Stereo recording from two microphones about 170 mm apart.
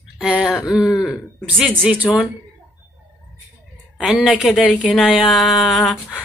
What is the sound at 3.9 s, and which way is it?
Speech, 5° right (ahead or behind).